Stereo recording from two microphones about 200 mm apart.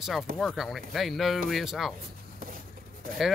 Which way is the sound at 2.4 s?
45° right (ahead or behind).